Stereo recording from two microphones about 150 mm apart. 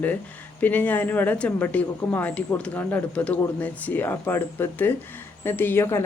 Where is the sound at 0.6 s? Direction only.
10° left (ahead or behind).